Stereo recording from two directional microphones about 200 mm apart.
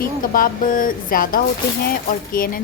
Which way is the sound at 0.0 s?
45° left (ahead or behind).